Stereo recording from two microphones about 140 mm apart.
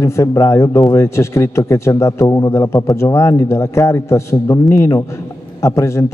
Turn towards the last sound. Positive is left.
turn(degrees=20)  # may be behind; listen again after turning